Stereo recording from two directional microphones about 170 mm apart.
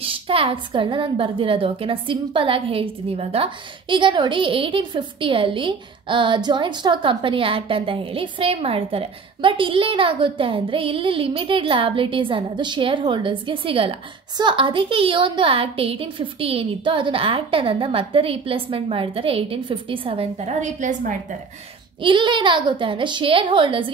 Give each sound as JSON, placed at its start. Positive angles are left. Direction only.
{"t": 0.0, "sound": "a woman's voice", "side_deg": -35}
{"t": 22.0, "sound": "a woman's voice", "side_deg": -30}